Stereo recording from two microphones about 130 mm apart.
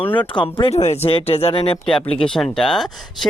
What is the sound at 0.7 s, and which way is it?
Speech, 55° left (ahead or behind).